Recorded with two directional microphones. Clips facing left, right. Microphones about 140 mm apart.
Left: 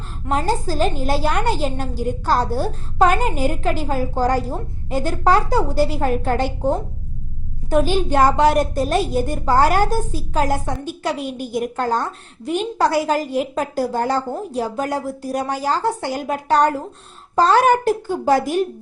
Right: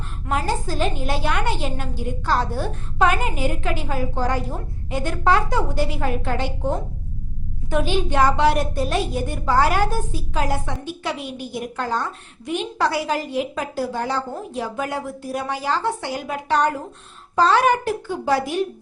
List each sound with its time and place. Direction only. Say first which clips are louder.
0.3 s a woman's voice: left 3 dB; 35° left (ahead or behind)